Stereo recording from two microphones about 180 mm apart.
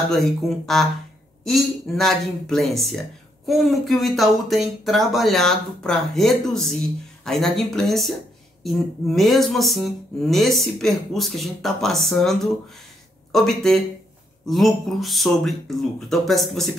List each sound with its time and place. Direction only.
0.1 s speech: centre (ahead or behind)